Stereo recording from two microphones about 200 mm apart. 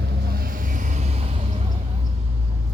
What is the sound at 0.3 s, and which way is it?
Vehicle, 45° right (ahead or behind).